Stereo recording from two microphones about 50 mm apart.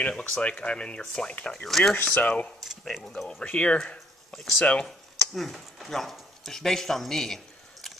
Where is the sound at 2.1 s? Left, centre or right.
Left.